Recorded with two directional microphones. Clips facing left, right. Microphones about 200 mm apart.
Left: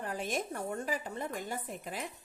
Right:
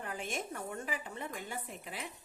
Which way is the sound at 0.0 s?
40° left (ahead or behind).